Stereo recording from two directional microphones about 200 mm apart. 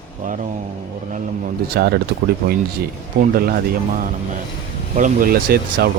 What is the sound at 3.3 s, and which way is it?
Speech, 50° right (ahead or behind).